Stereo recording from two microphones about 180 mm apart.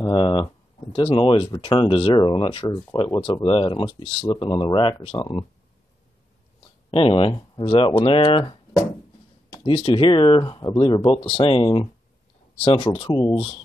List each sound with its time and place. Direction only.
0.0 s speech: 25° left (ahead or behind)
7.0 s speech: 30° left (ahead or behind)
9.7 s speech: 30° left (ahead or behind)